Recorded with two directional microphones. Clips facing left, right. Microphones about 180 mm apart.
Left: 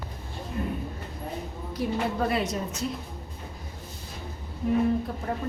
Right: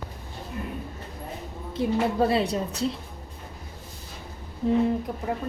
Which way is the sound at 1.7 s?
30° right (ahead or behind).